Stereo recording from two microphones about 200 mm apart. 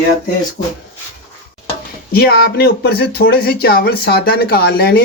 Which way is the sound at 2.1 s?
50° left (ahead or behind).